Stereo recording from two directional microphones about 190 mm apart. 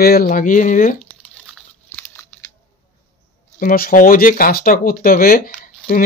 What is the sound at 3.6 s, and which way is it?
Speech, 45° left (ahead or behind).